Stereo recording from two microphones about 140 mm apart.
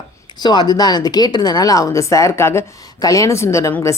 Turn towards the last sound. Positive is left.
turn(degrees=20)  # may be behind; listen again after turning